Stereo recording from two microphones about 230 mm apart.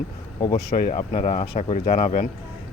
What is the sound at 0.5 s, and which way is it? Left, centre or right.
Speech, left.